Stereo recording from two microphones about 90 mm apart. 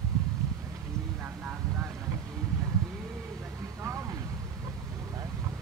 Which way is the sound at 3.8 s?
35° right (ahead or behind).